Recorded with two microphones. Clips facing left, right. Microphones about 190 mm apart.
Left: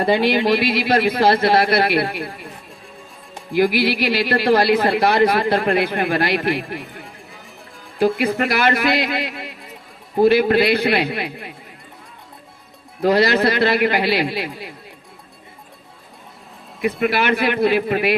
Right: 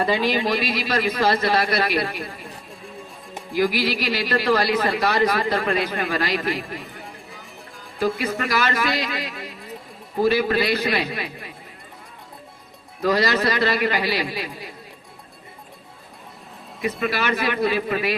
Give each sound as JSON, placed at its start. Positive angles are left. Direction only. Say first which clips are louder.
{"t": 0.1, "sound": "speech", "louder": "left 5 dB", "side_deg": 60}
{"t": 2.3, "sound": "a sound", "louder": "left 2 dB", "side_deg": 0}
{"t": 3.6, "sound": "speech", "louder": "left 4 dB", "side_deg": 60}
{"t": 6.8, "sound": "music", "louder": "left 2 dB", "side_deg": 0}
{"t": 8.4, "sound": "speech", "louder": "left 5 dB", "side_deg": 55}
{"t": 13.0, "sound": "speech", "louder": "left 5 dB", "side_deg": 60}
{"t": 17.1, "sound": "speech", "louder": "left 4 dB", "side_deg": 60}